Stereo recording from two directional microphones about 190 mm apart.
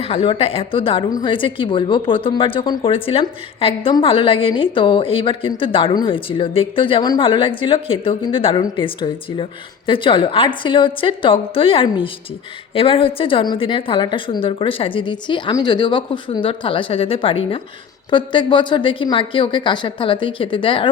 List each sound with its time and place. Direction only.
0.0 s a woman's voice: 30° left (ahead or behind)